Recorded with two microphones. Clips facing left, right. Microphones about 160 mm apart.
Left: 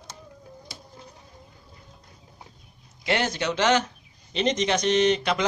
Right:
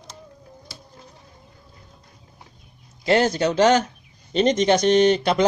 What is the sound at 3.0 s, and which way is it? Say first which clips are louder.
Speech: right 7 dB; 35° right (ahead or behind).